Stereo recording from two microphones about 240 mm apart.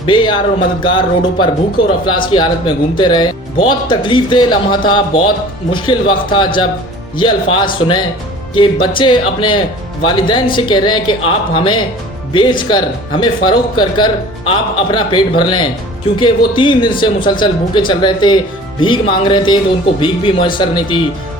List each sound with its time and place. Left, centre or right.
0.0 s speech: centre